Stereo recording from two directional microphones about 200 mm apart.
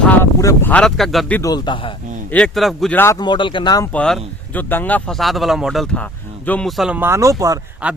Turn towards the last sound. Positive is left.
turn(degrees=-5)  # may be behind; listen again after turning